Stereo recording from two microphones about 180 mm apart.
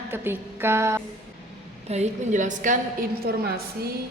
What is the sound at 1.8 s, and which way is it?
A woman's voice, 40° right (ahead or behind).